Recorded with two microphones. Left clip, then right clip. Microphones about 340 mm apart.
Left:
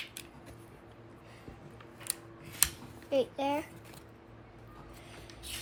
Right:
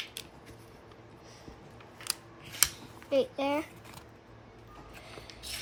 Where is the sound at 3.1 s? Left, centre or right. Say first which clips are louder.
Right 2 dB; right.